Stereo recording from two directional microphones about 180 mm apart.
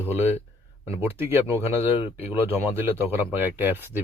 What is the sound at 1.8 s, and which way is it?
Speech, 10° right (ahead or behind).